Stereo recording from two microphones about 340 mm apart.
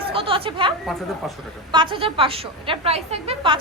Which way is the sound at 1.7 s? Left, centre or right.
Centre.